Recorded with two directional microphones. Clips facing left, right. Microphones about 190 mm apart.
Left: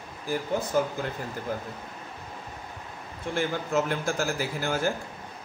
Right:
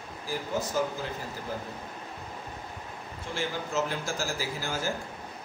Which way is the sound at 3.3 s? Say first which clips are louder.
Left 4 dB; 55° left (ahead or behind).